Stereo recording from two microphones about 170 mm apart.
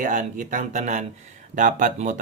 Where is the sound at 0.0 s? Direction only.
50° right (ahead or behind).